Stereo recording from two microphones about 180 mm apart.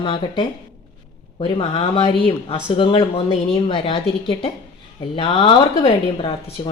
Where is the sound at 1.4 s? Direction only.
30° left (ahead or behind).